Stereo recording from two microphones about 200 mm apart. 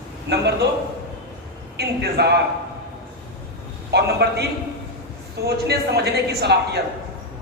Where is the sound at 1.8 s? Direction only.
55° right (ahead or behind).